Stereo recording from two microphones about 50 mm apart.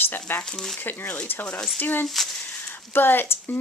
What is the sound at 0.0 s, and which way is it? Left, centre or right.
Speech, left.